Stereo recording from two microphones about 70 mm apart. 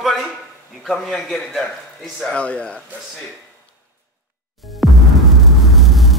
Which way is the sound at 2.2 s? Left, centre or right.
Centre.